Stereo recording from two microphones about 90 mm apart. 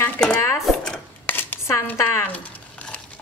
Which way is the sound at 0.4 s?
35° left (ahead or behind).